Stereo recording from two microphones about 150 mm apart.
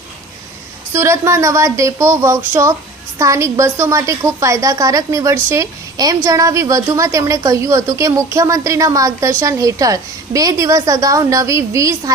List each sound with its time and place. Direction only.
0.9 s a woman's voice: 20° right (ahead or behind)